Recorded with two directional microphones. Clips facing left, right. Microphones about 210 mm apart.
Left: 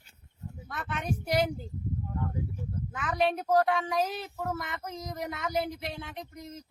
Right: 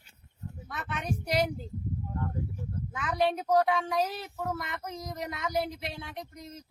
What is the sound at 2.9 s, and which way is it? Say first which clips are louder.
Speech: even; centre (ahead or behind).